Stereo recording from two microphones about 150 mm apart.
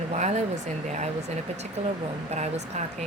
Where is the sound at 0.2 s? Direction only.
50° right (ahead or behind).